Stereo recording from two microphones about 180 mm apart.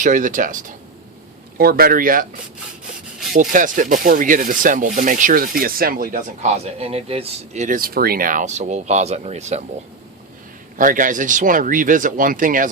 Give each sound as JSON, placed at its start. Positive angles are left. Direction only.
{"t": 0.0, "sound": "speech", "side_deg": -45}
{"t": 1.5, "sound": "speech", "side_deg": -55}
{"t": 3.5, "sound": "speech", "side_deg": -45}
{"t": 10.8, "sound": "speech", "side_deg": -45}